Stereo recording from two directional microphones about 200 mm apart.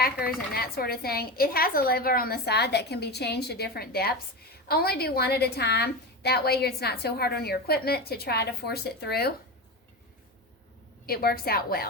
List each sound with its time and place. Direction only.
0.5 s a woman's voice: 50° left (ahead or behind)
11.0 s a woman's voice: 50° left (ahead or behind)